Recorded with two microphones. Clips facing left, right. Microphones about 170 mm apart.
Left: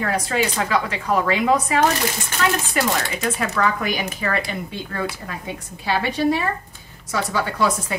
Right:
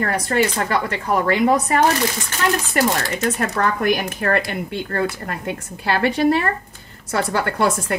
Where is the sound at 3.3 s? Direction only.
50° right (ahead or behind).